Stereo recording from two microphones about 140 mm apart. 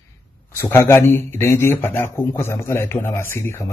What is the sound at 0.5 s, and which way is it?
A man's voice, 20° left (ahead or behind).